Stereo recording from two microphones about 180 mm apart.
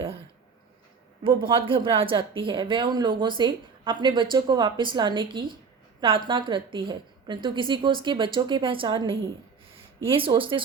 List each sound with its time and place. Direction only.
1.2 s speech: 25° right (ahead or behind)